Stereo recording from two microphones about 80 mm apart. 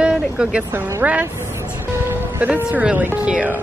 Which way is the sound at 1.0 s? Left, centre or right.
Centre.